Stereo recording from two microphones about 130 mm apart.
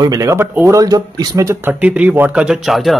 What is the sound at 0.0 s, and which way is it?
Speech, 25° right (ahead or behind).